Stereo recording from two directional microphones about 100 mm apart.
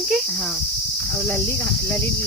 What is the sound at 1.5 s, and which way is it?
Cricket, 20° left (ahead or behind).